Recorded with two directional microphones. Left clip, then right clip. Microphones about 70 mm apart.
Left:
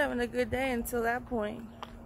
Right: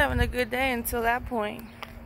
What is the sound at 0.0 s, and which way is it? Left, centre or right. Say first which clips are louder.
Speech: right 4 dB; left.